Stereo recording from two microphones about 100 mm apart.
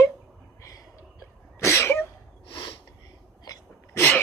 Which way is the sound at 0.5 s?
35° left (ahead or behind).